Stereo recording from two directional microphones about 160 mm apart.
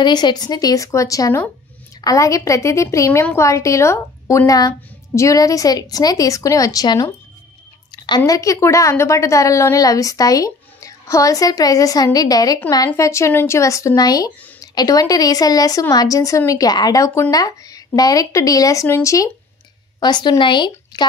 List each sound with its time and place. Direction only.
0.0 s a woman's voice: 25° left (ahead or behind)
8.3 s a woman's voice: 20° left (ahead or behind)